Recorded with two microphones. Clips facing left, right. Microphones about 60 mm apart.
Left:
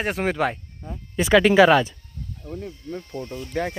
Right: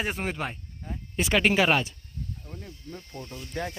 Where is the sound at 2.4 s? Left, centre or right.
Left.